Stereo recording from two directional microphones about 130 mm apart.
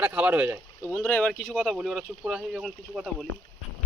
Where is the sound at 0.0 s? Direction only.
10° right (ahead or behind).